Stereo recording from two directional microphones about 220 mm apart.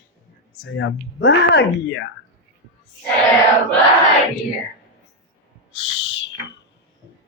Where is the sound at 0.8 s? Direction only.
50° left (ahead or behind).